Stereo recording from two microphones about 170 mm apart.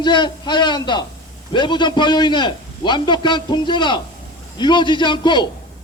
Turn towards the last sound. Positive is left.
turn(degrees=25)  # may be behind; listen again after turning